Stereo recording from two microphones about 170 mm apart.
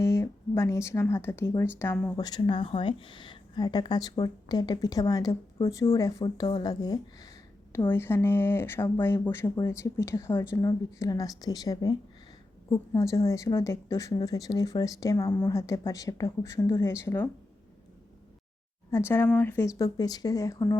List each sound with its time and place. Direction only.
0.0 s a woman's voice: 15° left (ahead or behind)
2.2 s a woman's voice: 25° left (ahead or behind)
18.9 s a woman's voice: 15° left (ahead or behind)